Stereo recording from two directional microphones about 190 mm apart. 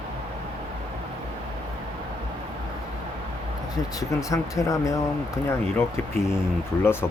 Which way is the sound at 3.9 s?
15° left (ahead or behind).